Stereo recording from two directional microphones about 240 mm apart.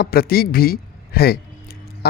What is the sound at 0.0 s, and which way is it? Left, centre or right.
Speech, left.